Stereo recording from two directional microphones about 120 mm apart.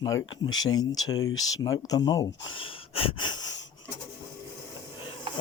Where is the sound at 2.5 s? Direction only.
50° left (ahead or behind).